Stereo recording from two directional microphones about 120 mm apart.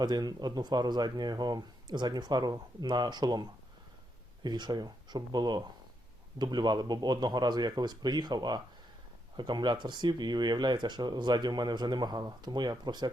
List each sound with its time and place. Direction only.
0.0 s speech: 35° right (ahead or behind)
4.4 s speech: 35° right (ahead or behind)